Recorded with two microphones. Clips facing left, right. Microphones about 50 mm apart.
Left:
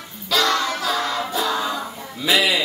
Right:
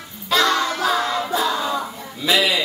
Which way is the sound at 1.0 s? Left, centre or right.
Centre.